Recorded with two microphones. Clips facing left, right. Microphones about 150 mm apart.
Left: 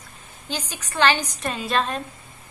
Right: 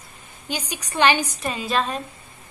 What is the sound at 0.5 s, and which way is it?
Speech, 10° right (ahead or behind).